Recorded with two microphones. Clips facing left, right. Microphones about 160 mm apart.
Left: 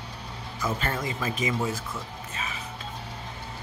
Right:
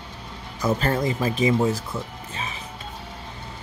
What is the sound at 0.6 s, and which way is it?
Speech, 40° right (ahead or behind).